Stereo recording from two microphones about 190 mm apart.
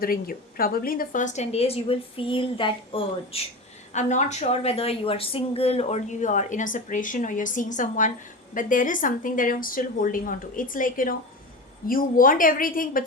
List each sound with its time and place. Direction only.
0.0 s a woman's voice: 50° left (ahead or behind); by 3.4 s 25° left (ahead or behind)
3.9 s a woman's voice: 40° left (ahead or behind)